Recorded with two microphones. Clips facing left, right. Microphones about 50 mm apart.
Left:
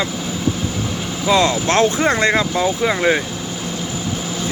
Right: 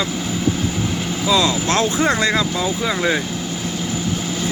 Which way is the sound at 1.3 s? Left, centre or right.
Left.